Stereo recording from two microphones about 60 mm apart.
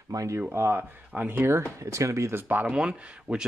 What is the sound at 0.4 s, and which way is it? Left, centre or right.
Speech, right.